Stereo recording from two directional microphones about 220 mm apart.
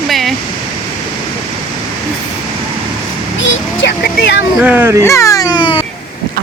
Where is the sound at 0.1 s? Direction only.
Centre (ahead or behind).